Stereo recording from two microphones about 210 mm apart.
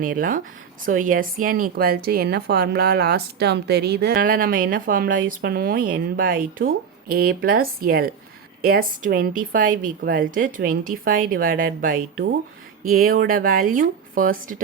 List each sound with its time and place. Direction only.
0.0 s a woman's voice: 40° right (ahead or behind)